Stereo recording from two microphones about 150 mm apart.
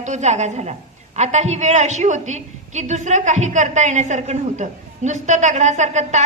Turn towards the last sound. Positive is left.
turn(degrees=-50)  # may be behind; listen again after turning